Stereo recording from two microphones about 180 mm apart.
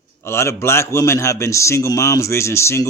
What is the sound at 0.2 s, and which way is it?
A man's voice, 15° left (ahead or behind).